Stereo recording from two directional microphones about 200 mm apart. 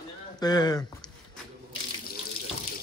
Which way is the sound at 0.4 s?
20° left (ahead or behind).